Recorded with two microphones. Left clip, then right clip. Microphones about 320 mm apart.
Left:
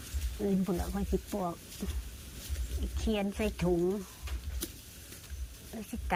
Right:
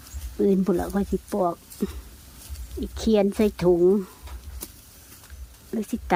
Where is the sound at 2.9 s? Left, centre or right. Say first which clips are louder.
Right 13 dB; centre.